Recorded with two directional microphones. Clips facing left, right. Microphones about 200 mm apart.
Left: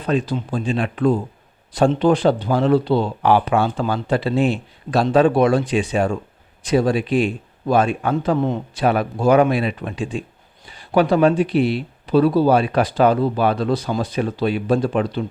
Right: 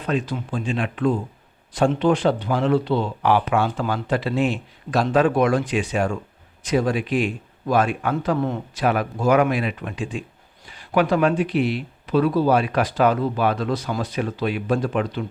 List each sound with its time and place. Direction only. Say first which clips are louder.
0.0 s speech: left 4 dB; 35° left (ahead or behind)